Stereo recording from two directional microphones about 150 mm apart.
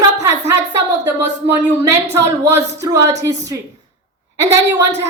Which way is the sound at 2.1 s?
15° right (ahead or behind).